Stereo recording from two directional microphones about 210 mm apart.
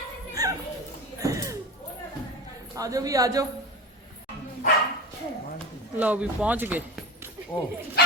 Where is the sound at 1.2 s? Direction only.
15° right (ahead or behind).